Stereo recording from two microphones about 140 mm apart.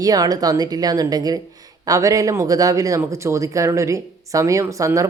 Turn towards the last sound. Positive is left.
turn(degrees=-25)  # may be behind; listen again after turning